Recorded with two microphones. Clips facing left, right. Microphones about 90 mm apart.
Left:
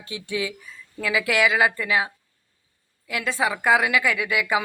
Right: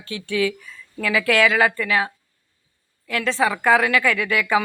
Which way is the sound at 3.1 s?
15° left (ahead or behind).